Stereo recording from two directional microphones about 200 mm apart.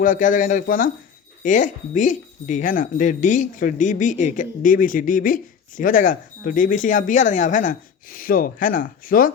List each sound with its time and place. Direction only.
0.0 s speech: 40° left (ahead or behind)